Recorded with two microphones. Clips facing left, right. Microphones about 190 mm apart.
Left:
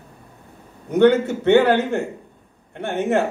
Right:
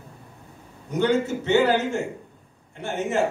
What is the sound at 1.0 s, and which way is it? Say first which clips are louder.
A man's voice: left 7 dB; 60° left (ahead or behind).